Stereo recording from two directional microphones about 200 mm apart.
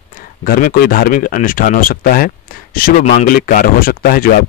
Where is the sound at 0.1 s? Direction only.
45° left (ahead or behind).